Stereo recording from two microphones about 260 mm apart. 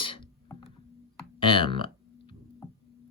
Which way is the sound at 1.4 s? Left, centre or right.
Centre.